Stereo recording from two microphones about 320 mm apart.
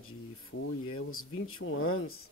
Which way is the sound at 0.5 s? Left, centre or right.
Left.